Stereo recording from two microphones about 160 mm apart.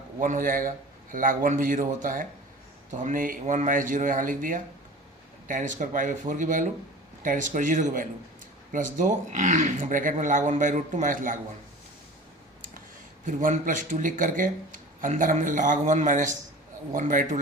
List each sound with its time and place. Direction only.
0.2 s a man's voice: 60° right (ahead or behind)
13.2 s a man's voice: 55° right (ahead or behind)